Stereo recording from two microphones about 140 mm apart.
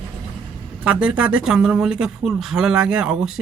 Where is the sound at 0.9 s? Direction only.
10° right (ahead or behind).